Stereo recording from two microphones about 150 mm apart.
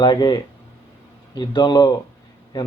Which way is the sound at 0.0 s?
30° left (ahead or behind).